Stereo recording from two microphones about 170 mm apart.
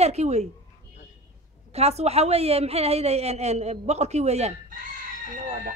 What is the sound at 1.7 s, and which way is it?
Speech, 40° right (ahead or behind).